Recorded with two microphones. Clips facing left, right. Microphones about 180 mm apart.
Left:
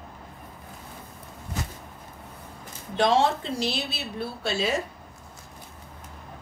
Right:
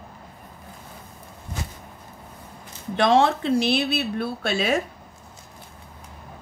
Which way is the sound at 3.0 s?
60° right (ahead or behind).